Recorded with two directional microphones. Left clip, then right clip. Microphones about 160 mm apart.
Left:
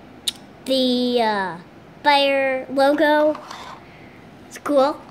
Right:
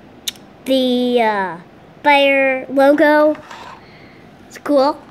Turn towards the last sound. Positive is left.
turn(degrees=-25)  # may be behind; listen again after turning